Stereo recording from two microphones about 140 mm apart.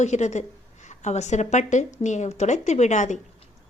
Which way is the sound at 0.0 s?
55° left (ahead or behind).